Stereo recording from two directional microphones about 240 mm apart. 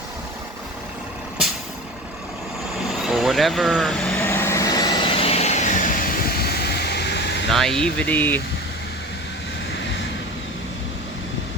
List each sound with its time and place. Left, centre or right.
3.0 s vehicle: centre; by 7.4 s left
7.5 s speech: centre